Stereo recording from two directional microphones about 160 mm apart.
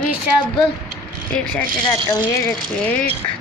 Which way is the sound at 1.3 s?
5° left (ahead or behind).